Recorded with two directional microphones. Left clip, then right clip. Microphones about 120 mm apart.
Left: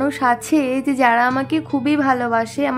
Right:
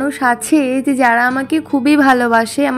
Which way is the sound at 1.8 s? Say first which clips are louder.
Right 7 dB; 35° right (ahead or behind).